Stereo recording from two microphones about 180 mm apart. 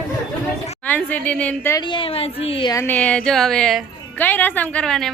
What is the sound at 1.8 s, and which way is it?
Speech, 25° left (ahead or behind).